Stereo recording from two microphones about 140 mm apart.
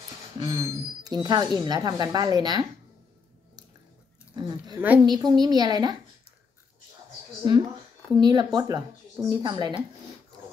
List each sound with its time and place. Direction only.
0.4 s speech: 30° right (ahead or behind)
4.5 s speech: 30° right (ahead or behind)
8.1 s speech: 30° right (ahead or behind)